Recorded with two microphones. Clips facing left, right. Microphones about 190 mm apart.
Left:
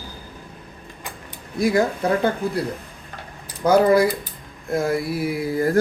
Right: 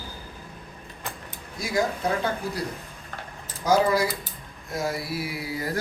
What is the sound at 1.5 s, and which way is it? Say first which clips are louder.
Speech: left 10 dB; 55° left (ahead or behind).